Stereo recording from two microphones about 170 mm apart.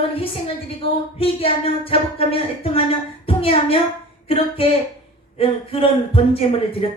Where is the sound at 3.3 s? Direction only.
35° left (ahead or behind).